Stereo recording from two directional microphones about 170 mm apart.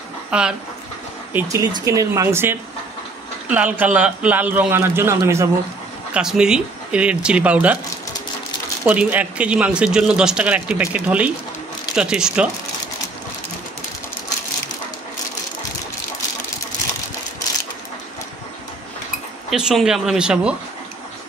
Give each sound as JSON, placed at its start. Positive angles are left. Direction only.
{"t": 0.3, "sound": "speech", "side_deg": -5}
{"t": 1.3, "sound": "speech", "side_deg": -20}
{"t": 6.1, "sound": "speech", "side_deg": -5}
{"t": 8.8, "sound": "speech", "side_deg": -10}
{"t": 19.5, "sound": "speech", "side_deg": -5}